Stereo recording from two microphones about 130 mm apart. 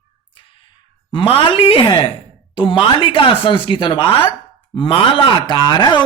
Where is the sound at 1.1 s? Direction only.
40° left (ahead or behind).